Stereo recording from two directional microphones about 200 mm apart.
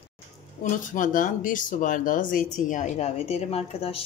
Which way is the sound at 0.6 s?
40° left (ahead or behind).